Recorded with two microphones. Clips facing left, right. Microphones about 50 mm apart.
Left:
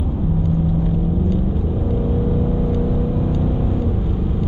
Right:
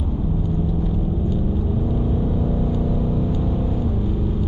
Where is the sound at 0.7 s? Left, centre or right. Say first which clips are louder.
Left 4 dB; centre.